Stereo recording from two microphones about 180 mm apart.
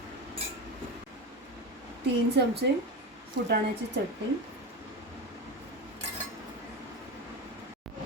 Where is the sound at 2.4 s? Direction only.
70° right (ahead or behind).